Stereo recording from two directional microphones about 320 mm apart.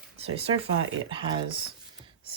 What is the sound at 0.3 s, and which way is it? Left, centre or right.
Speech, centre.